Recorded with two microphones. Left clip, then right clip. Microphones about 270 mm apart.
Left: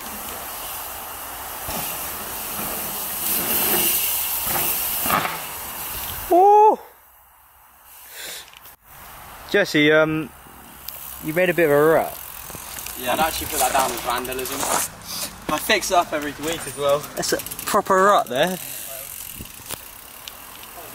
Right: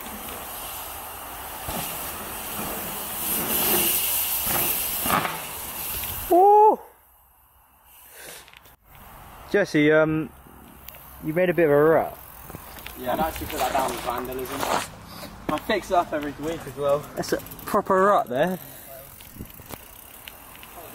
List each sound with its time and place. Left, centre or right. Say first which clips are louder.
1.8 s train: left 2 dB; centre
3.3 s hiss: left 3 dB; centre
3.6 s vehicle: left 1 dB; centre
4.5 s hiss: left 2 dB; centre
6.2 s a sound: left 2 dB; centre
9.5 s speech: left 3 dB; centre
11.2 s speech: left 2 dB; centre
13.7 s speech: left 4 dB; centre
14.1 s speech: left 4 dB; centre